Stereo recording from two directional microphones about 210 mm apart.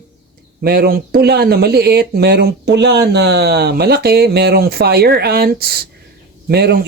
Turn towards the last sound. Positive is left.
turn(degrees=-50)  # may be behind; listen again after turning